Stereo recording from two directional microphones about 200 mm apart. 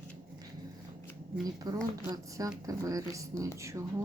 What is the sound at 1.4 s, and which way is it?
A woman's voice, 20° right (ahead or behind).